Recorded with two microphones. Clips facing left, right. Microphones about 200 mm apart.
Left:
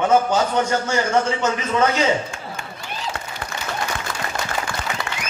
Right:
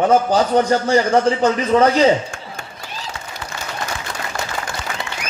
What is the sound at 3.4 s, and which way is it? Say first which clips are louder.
Applause: right 1 dB; 55° left (ahead or behind).